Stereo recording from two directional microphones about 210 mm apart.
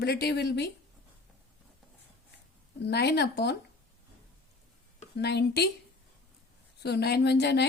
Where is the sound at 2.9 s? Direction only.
50° left (ahead or behind).